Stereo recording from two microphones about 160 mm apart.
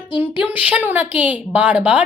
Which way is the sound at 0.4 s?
10° right (ahead or behind).